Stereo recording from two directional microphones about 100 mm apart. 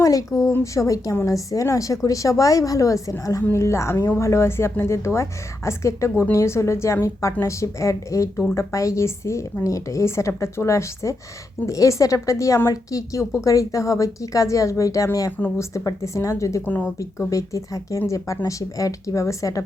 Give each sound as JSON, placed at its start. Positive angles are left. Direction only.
{"t": 0.0, "sound": "a woman's voice", "side_deg": 35}